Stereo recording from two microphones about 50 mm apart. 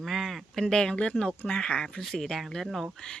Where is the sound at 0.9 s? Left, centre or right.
Left.